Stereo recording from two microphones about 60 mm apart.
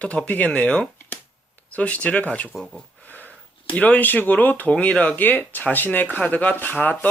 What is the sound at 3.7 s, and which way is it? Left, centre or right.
Speech, left.